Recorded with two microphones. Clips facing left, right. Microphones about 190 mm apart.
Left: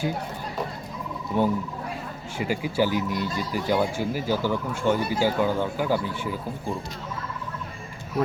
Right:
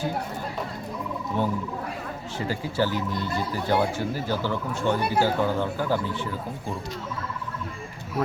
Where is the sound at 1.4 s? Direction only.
15° left (ahead or behind).